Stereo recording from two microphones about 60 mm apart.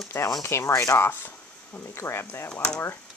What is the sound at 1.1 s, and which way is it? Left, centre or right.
Speech, left.